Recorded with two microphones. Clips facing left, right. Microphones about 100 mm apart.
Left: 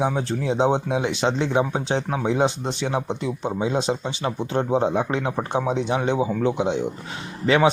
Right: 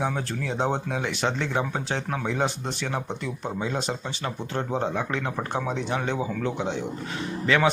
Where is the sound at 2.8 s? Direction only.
20° left (ahead or behind).